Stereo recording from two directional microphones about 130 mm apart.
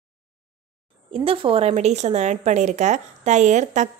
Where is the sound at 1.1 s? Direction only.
45° right (ahead or behind).